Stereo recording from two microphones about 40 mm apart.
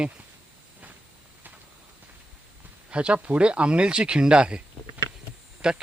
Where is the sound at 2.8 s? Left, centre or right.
Right.